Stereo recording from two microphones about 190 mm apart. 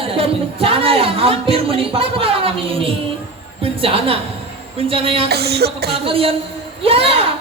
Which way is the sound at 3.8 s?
30° right (ahead or behind).